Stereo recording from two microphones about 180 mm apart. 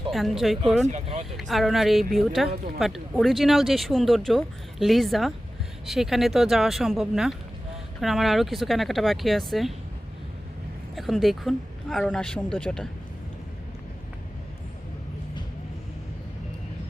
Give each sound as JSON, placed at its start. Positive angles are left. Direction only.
{"t": 0.1, "sound": "speech", "side_deg": 0}
{"t": 0.9, "sound": "speech", "side_deg": -35}
{"t": 1.4, "sound": "speech", "side_deg": 0}
{"t": 10.9, "sound": "speech", "side_deg": 0}